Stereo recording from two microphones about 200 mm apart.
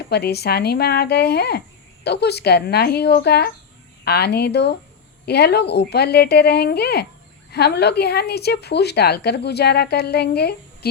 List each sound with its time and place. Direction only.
0.1 s a woman's voice: 55° left (ahead or behind)